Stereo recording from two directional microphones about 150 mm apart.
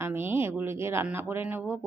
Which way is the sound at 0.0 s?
15° right (ahead or behind).